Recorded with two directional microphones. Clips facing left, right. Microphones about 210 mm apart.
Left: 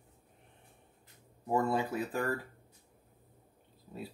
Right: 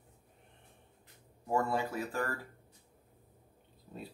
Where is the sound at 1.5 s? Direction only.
20° left (ahead or behind).